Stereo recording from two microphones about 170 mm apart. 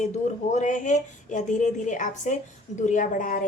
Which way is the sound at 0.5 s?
45° left (ahead or behind).